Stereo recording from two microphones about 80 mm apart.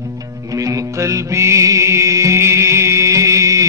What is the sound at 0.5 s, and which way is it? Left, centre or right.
Music, right.